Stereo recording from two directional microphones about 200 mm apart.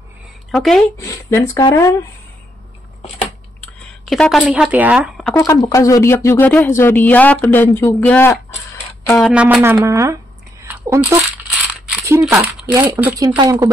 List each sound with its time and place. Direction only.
0.5 s speech: centre (ahead or behind)
0.9 s speech: 15° left (ahead or behind)
3.2 s typing: 5° left (ahead or behind)
5.5 s speech: 15° left (ahead or behind); by 10.1 s 15° right (ahead or behind)
10.6 s a sound: 10° right (ahead or behind)
12.2 s speech: centre (ahead or behind)